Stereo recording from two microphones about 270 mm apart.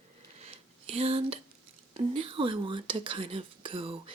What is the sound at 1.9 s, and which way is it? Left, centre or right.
Speech, centre.